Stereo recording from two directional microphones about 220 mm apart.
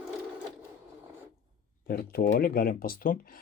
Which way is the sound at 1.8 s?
45° left (ahead or behind).